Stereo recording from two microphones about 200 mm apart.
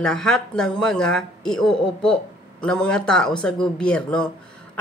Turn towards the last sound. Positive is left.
turn(degrees=5)  # may be behind; listen again after turning